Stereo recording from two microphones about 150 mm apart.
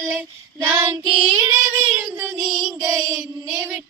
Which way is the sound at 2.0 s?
15° right (ahead or behind).